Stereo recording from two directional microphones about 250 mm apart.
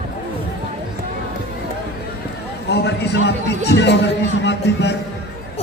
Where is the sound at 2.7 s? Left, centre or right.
Left.